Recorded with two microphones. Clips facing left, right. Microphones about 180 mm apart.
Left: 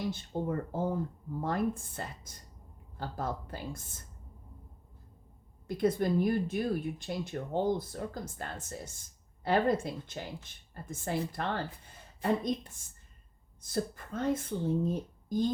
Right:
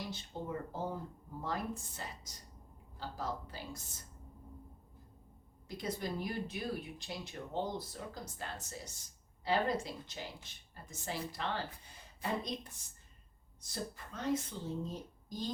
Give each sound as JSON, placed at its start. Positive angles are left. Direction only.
{"t": 0.1, "sound": "speech", "side_deg": 50}
{"t": 5.6, "sound": "speech", "side_deg": 55}
{"t": 13.6, "sound": "speech", "side_deg": 50}